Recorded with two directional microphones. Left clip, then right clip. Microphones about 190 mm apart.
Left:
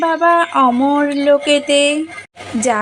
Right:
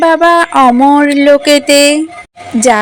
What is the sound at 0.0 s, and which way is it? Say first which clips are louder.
A woman's voice: right 6 dB; 30° right (ahead or behind).